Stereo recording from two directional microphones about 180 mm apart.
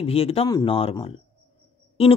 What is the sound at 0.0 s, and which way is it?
Speech, 35° left (ahead or behind).